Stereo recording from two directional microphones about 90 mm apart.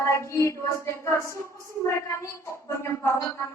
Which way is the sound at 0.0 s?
30° left (ahead or behind).